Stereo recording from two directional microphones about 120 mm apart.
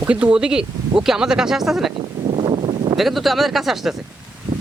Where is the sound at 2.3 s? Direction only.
45° right (ahead or behind).